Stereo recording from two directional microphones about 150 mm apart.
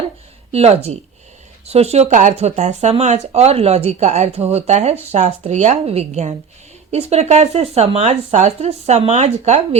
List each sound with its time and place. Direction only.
0.5 s speech: 45° right (ahead or behind)